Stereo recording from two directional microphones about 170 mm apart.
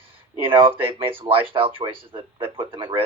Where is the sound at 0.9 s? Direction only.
30° right (ahead or behind).